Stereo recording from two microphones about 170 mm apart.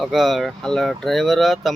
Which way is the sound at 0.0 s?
Centre (ahead or behind).